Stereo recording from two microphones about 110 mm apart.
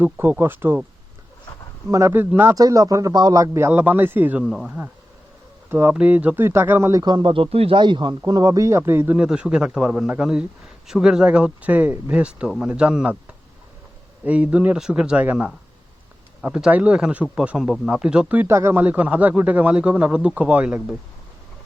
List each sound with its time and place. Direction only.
0.0 s a man's voice: 20° right (ahead or behind)
1.9 s a man's voice: 25° right (ahead or behind)
2.6 s a man's voice: 35° right (ahead or behind); by 4.4 s 15° right (ahead or behind)
4.4 s a man's voice: 5° right (ahead or behind); by 7.0 s 20° right (ahead or behind)
7.0 s speech: 45° right (ahead or behind); by 7.8 s 60° right (ahead or behind)
7.8 s speech: 45° right (ahead or behind)
8.2 s a man's voice: 35° right (ahead or behind); by 9.2 s 20° right (ahead or behind)
9.2 s speech: 10° right (ahead or behind)
14.3 s speech: 10° right (ahead or behind)